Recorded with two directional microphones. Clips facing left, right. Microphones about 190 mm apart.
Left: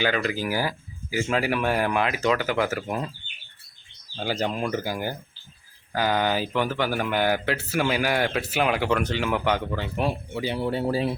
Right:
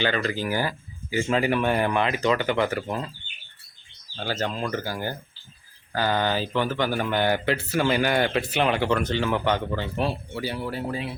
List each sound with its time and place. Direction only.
0.0 s speech: 10° left (ahead or behind)
4.1 s speech: 15° left (ahead or behind); by 11.1 s 30° left (ahead or behind)